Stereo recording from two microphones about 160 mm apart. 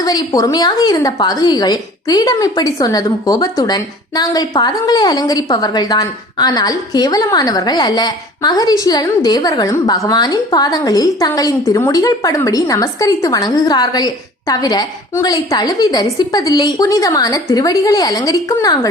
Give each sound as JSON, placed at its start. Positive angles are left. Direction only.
{"t": 0.0, "sound": "a woman's voice", "side_deg": 25}